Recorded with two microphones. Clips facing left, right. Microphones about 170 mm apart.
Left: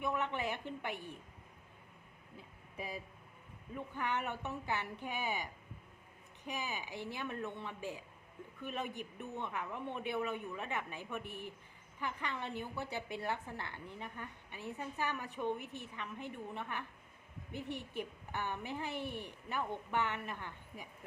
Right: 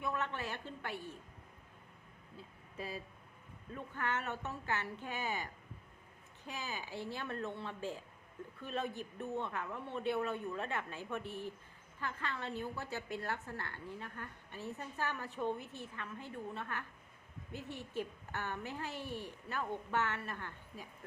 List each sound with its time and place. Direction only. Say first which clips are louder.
0.0 s a woman's voice: left 2 dB; 15° left (ahead or behind)
2.7 s a woman's voice: even; 15° left (ahead or behind)